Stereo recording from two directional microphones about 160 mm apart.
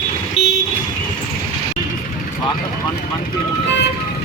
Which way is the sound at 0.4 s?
40° left (ahead or behind).